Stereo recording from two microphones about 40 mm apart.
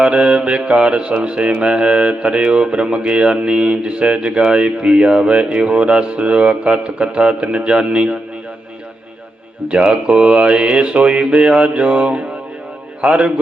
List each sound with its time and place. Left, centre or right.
0.0 s speech: right
9.6 s speech: right